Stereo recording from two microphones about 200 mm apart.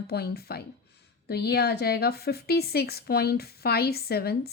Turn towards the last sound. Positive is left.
turn(degrees=50)  # may be behind; listen again after turning